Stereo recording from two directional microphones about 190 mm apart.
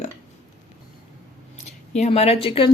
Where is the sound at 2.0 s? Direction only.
30° left (ahead or behind).